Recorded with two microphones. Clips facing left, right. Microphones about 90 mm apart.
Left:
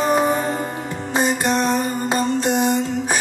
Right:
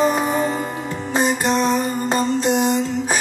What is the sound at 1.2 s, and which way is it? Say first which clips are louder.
Music: right 1 dB; 50° left (ahead or behind).